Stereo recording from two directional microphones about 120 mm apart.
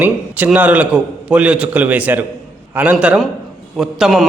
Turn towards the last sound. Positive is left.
turn(degrees=0)  # may be behind; listen again after turning